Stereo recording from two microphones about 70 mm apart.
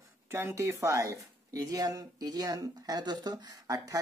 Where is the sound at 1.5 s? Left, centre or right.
Right.